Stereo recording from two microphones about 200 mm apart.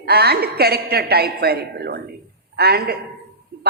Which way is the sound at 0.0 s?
50° right (ahead or behind).